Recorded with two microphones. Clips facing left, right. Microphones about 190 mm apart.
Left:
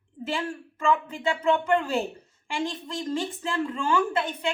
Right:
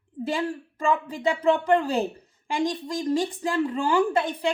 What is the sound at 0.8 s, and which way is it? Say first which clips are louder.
Speech: right 1 dB; 35° right (ahead or behind).